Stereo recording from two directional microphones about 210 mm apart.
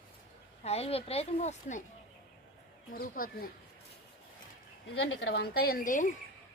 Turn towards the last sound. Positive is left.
turn(degrees=40)  # may be behind; listen again after turning